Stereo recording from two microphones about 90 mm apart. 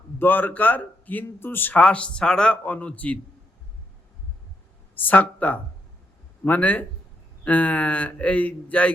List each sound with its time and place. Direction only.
0.2 s a man's voice: 20° left (ahead or behind)
5.0 s a man's voice: 15° left (ahead or behind)